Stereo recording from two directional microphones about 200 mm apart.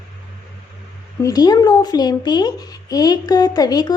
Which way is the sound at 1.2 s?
20° left (ahead or behind).